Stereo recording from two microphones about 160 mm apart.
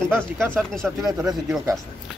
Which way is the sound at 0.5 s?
5° left (ahead or behind).